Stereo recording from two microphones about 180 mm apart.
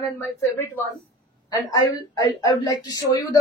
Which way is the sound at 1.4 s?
20° left (ahead or behind).